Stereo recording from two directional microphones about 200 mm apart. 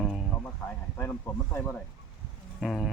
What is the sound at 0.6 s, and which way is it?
Speech, 10° left (ahead or behind).